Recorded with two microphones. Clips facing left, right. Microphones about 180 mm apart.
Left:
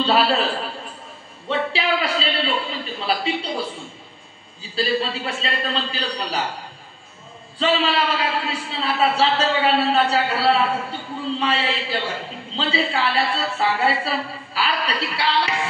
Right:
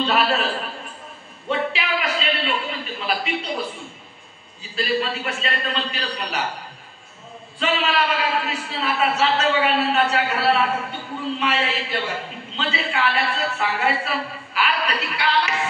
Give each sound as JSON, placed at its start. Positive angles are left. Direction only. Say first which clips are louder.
{"t": 0.0, "sound": "a man's voice", "louder": "left 2 dB", "side_deg": 30}
{"t": 1.7, "sound": "a sound", "louder": "left 3 dB", "side_deg": 30}
{"t": 4.7, "sound": "a man's voice", "louder": "left 1 dB", "side_deg": 30}
{"t": 7.5, "sound": "a man's voice", "louder": "left 2 dB", "side_deg": 30}